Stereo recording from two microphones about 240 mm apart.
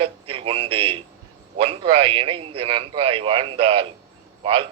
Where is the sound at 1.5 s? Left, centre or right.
Right.